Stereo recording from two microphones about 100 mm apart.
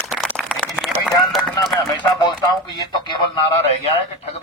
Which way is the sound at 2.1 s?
45° left (ahead or behind).